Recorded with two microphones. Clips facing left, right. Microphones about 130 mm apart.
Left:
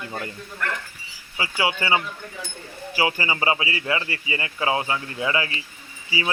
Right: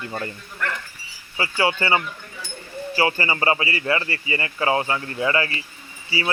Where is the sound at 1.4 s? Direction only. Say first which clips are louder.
Right 3 dB; 15° left (ahead or behind).